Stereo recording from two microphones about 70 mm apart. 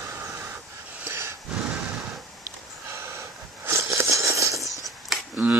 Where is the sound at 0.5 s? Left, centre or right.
Right.